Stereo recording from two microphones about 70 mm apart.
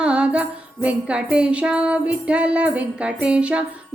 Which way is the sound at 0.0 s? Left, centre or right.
Centre.